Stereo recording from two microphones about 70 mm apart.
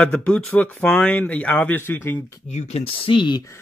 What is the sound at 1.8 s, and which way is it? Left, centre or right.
Speech, left.